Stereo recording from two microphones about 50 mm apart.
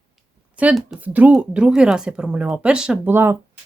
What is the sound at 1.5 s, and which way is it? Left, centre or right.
Speech, centre.